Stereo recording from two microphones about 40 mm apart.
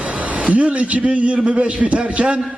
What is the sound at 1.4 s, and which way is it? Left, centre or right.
A man's voice, right.